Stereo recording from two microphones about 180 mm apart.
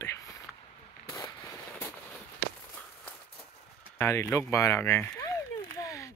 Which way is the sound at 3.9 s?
15° left (ahead or behind).